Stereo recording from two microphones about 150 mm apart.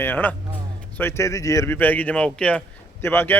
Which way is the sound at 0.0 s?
10° left (ahead or behind).